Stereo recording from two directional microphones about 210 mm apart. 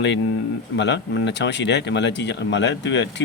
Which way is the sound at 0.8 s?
55° left (ahead or behind).